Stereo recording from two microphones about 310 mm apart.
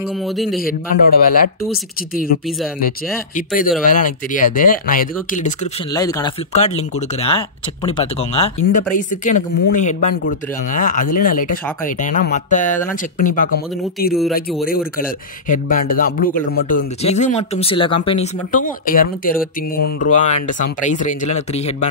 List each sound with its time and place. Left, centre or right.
0.4 s a man's voice: centre
0.7 s a man's voice: left
3.3 s a man's voice: left
5.9 s a man's voice: centre
15.0 s a man's voice: left